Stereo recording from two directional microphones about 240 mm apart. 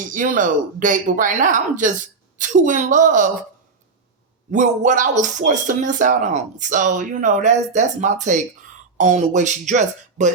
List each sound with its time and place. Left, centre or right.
0.1 s speech: right
4.5 s speech: right